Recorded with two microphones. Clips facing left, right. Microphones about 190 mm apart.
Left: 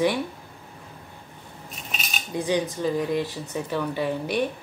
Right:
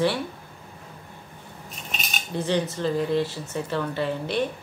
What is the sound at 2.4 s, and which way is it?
Speech, 15° left (ahead or behind).